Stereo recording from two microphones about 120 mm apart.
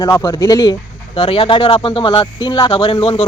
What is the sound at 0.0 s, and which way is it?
Speech, 30° left (ahead or behind).